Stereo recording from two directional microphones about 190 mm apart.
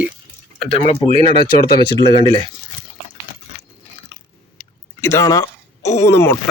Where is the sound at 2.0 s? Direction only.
25° left (ahead or behind).